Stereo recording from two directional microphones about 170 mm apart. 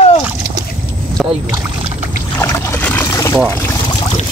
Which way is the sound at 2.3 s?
15° left (ahead or behind).